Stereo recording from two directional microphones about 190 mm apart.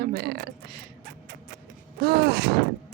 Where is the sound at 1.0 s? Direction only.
55° right (ahead or behind).